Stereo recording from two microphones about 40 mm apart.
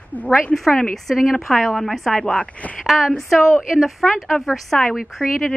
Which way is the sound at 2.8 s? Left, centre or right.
Centre.